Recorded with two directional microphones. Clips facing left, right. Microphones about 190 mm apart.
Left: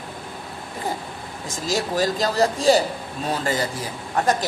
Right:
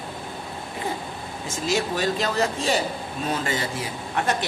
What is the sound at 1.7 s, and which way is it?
Speech, 40° left (ahead or behind).